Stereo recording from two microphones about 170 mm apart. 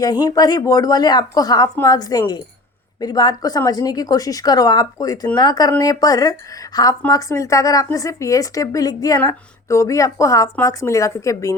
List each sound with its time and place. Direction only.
0.0 s speech: 25° left (ahead or behind)